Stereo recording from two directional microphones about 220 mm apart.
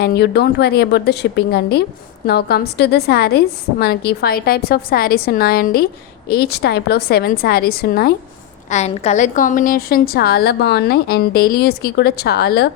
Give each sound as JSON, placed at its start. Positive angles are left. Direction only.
{"t": 0.0, "sound": "a woman's voice", "side_deg": 50}
{"t": 8.7, "sound": "a woman's voice", "side_deg": 30}